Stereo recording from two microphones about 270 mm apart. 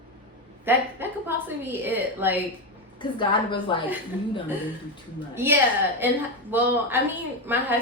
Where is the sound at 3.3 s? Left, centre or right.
Centre.